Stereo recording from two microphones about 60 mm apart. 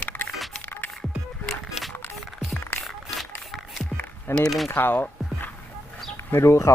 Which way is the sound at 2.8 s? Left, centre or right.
Centre.